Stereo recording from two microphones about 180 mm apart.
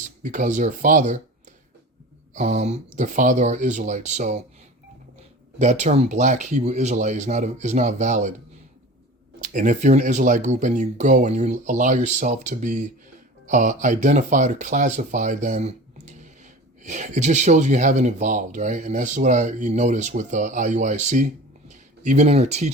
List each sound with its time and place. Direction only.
0.2 s speech: 45° right (ahead or behind)
2.3 s speech: 40° right (ahead or behind)
5.5 s speech: 40° right (ahead or behind)
9.4 s speech: 45° right (ahead or behind)